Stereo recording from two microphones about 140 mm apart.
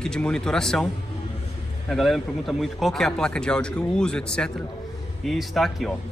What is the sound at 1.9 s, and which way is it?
Speech, centre (ahead or behind).